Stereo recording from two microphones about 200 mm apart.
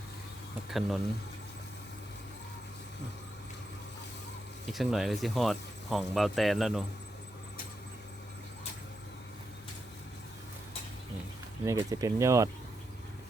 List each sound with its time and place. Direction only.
0.7 s speech: centre (ahead or behind)
4.7 s speech: centre (ahead or behind)
11.6 s speech: 15° right (ahead or behind)